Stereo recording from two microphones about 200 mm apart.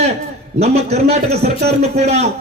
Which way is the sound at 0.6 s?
30° right (ahead or behind).